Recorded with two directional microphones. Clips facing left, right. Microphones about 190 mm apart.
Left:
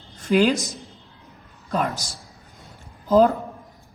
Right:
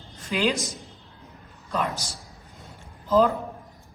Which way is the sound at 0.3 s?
45° left (ahead or behind).